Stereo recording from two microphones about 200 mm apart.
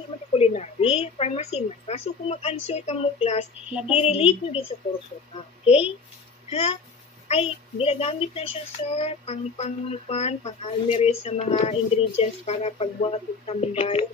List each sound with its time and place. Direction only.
0.3 s a child's voice: 35° left (ahead or behind)
6.5 s a child's voice: 30° left (ahead or behind)